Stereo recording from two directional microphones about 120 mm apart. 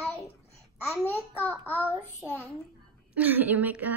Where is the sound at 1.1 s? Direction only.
15° left (ahead or behind).